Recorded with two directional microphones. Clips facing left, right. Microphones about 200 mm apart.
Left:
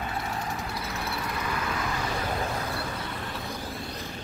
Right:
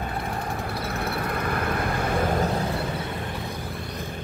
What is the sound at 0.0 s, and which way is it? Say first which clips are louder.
Vehicle: right 3 dB; 55° right (ahead or behind).